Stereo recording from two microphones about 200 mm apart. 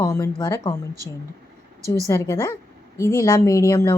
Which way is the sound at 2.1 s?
15° left (ahead or behind).